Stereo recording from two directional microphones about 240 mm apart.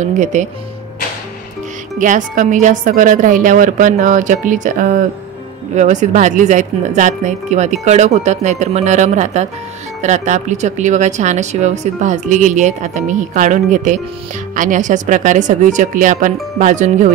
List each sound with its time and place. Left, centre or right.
0.0 s speech: right
2.0 s speech: right